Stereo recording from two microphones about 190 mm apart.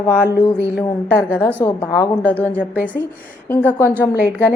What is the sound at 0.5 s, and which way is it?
Speech, 10° right (ahead or behind).